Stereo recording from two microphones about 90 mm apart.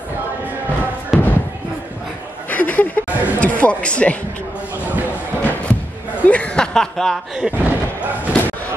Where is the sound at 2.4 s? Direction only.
20° left (ahead or behind).